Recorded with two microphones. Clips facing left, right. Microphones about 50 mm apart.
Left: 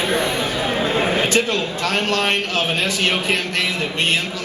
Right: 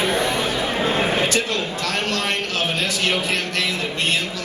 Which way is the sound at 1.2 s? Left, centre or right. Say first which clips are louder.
Left 3 dB; left.